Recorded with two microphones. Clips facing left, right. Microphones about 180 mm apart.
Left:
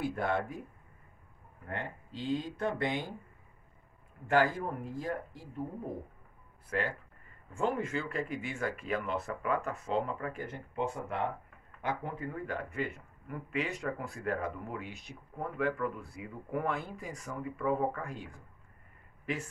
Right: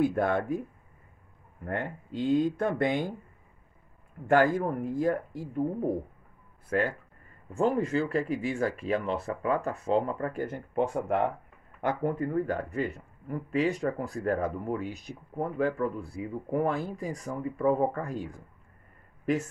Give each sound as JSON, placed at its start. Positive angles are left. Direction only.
{"t": 0.0, "sound": "speech", "side_deg": -50}
{"t": 1.7, "sound": "speech", "side_deg": -50}
{"t": 4.3, "sound": "speech", "side_deg": -50}
{"t": 6.7, "sound": "speech", "side_deg": -50}
{"t": 7.5, "sound": "speech", "side_deg": -35}